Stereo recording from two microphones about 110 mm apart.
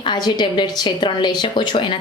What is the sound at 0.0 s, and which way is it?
A woman's voice, 40° left (ahead or behind).